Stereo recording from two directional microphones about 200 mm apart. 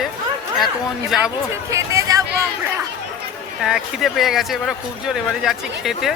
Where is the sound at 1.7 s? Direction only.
15° right (ahead or behind).